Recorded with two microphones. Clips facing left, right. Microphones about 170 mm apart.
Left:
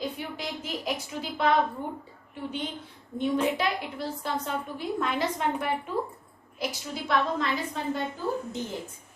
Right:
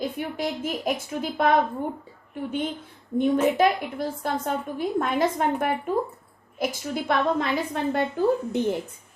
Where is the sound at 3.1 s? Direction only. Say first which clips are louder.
Right 5 dB; 50° right (ahead or behind).